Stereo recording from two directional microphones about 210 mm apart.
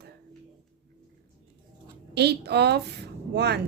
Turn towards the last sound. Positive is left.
turn(degrees=-50)  # may be behind; listen again after turning